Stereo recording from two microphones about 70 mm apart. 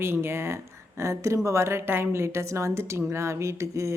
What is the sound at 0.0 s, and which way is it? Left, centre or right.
A woman's voice, right.